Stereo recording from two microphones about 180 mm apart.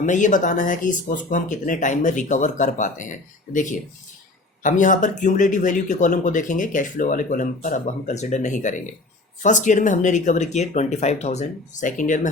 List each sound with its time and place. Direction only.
0.0 s speech: 45° left (ahead or behind)